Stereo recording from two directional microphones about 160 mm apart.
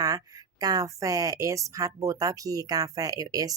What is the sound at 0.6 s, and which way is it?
Speech, 25° right (ahead or behind).